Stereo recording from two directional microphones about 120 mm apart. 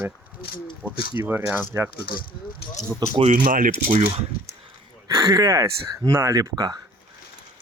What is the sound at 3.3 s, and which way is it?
Speech, 90° right.